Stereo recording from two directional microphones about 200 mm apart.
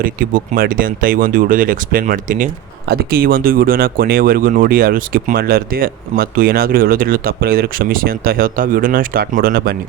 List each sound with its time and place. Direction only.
0.0 s speech: 45° right (ahead or behind)